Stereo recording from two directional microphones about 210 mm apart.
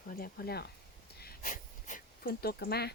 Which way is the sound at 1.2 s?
45° left (ahead or behind).